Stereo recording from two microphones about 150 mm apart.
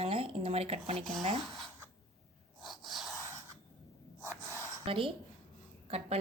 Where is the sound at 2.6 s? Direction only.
Centre (ahead or behind).